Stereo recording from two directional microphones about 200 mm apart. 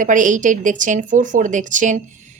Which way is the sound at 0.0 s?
40° right (ahead or behind).